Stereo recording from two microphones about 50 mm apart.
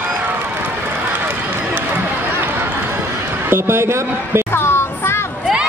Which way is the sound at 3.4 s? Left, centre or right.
Right.